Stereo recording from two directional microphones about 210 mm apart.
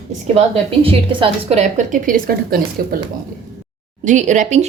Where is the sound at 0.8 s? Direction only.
25° right (ahead or behind); by 2.9 s 45° right (ahead or behind).